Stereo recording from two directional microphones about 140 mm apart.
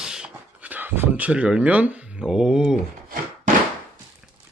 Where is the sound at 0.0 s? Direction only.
5° right (ahead or behind).